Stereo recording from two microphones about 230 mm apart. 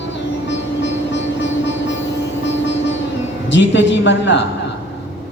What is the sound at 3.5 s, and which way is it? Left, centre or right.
Speech, left.